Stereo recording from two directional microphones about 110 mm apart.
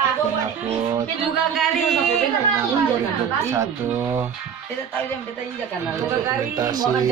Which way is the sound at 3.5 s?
25° right (ahead or behind).